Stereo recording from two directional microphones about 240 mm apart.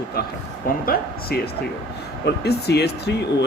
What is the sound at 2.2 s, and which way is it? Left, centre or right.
Speech, left.